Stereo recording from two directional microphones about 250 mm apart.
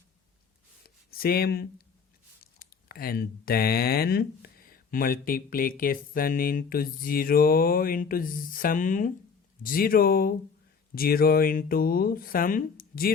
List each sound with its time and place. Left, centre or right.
1.2 s speech: left